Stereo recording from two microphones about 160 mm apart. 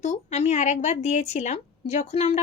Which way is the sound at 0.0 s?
45° left (ahead or behind).